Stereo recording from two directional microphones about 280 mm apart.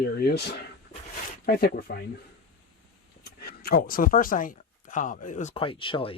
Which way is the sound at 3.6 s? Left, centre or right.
Left.